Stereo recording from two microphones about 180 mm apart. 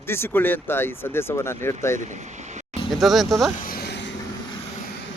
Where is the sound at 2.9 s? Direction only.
Centre (ahead or behind).